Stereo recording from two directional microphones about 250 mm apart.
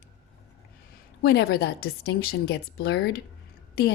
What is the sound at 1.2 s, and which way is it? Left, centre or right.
A woman's voice, left.